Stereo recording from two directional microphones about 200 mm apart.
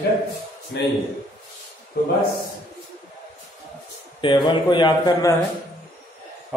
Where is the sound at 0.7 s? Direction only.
55° left (ahead or behind).